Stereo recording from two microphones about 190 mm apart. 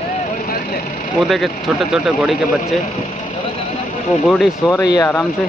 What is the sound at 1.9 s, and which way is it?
Speech, centre (ahead or behind).